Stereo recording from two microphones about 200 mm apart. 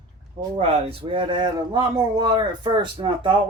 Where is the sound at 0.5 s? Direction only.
30° right (ahead or behind).